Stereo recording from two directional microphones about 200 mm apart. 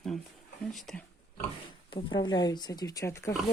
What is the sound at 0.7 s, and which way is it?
Speech, centre (ahead or behind).